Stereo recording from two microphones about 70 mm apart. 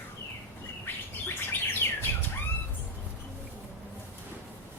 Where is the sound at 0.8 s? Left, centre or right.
Left.